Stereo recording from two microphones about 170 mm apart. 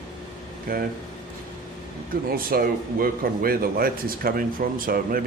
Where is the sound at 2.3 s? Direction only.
60° right (ahead or behind).